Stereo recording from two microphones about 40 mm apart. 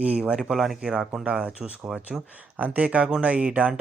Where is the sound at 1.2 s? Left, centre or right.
Right.